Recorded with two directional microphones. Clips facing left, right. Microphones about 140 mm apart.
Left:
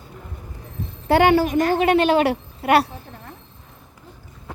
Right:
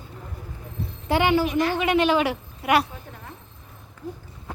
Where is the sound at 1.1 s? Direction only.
55° left (ahead or behind); by 2.2 s 40° left (ahead or behind).